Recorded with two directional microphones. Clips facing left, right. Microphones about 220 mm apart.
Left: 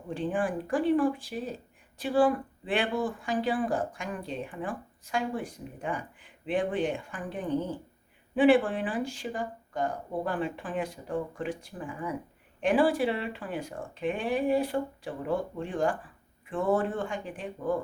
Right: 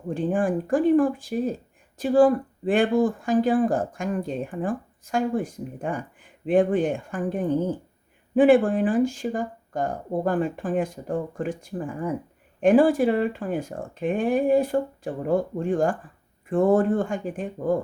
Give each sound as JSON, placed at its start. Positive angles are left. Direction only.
{"t": 0.1, "sound": "speech", "side_deg": -45}